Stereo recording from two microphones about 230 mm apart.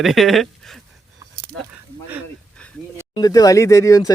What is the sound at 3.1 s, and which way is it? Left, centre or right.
Speech, centre.